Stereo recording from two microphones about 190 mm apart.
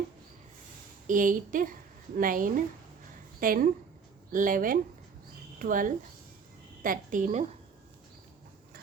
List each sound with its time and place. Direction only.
1.0 s a woman's voice: 45° right (ahead or behind)